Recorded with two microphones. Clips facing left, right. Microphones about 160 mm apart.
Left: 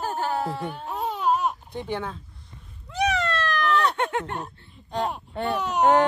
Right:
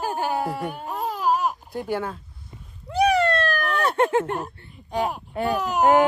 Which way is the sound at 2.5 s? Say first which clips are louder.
Right 4 dB; 15° right (ahead or behind).